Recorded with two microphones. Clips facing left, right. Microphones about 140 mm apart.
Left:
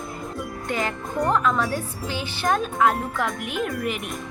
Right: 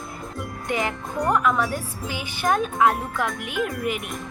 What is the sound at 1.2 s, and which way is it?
Speech, 10° right (ahead or behind).